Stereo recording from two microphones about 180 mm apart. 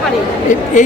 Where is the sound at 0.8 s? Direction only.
45° left (ahead or behind).